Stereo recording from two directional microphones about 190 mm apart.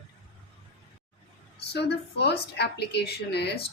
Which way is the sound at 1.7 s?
60° left (ahead or behind).